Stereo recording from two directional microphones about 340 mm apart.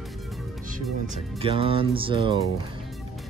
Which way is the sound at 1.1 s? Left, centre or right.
Centre.